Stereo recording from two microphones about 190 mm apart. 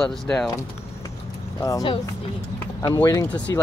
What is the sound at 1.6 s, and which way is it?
Speech, 20° left (ahead or behind).